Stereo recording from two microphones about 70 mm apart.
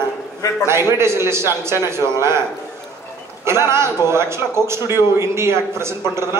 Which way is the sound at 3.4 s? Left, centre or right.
Right.